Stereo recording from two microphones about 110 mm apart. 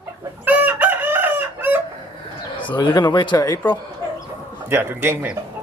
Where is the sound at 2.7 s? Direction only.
40° left (ahead or behind).